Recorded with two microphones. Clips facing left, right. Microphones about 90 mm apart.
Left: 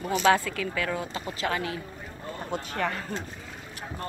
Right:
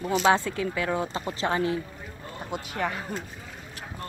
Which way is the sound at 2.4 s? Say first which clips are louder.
Even; 10° right (ahead or behind).